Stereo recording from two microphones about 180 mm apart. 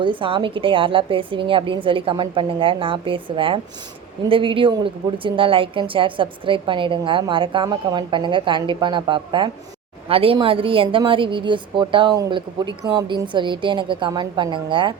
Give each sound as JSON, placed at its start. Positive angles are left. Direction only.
{"t": 0.0, "sound": "a woman's voice", "side_deg": -30}